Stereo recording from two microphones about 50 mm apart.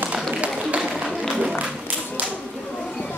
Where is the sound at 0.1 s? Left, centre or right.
Right.